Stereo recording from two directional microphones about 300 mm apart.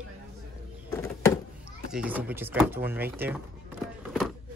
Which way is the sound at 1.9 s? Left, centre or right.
Centre.